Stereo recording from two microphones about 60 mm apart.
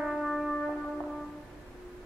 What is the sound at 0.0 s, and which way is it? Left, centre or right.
Music, centre.